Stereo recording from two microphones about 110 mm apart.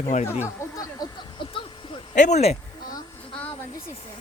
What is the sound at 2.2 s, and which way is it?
Speech, 90° left.